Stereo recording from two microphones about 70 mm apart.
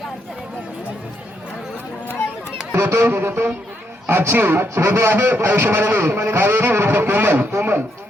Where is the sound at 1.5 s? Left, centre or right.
Centre.